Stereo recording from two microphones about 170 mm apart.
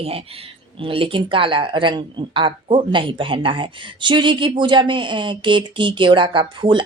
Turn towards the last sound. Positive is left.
turn(degrees=-30)  # may be behind; listen again after turning